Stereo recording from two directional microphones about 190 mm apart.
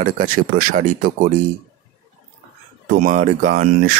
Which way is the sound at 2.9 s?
45° right (ahead or behind).